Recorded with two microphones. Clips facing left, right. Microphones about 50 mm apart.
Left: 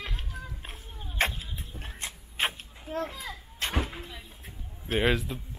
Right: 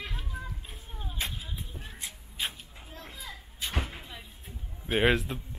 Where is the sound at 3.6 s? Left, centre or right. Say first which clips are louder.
Left 4 dB; left.